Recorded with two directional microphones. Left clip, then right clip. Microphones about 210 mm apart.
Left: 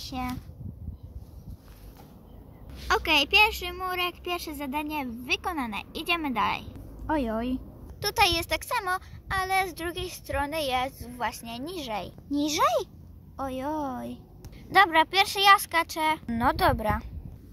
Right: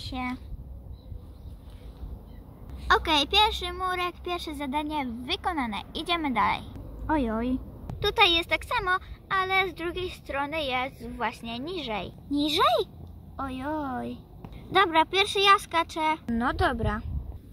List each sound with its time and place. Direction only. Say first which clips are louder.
0.1 s a child's voice: right 1 dB; 10° left (ahead or behind)
2.9 s a child's voice: even; centre (ahead or behind)
16.3 s speech: left 3 dB; 15° left (ahead or behind)